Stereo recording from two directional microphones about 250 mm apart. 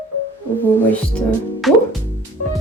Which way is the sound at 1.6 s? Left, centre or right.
Centre.